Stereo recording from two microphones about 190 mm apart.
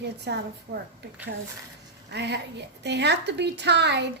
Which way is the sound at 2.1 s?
65° right (ahead or behind).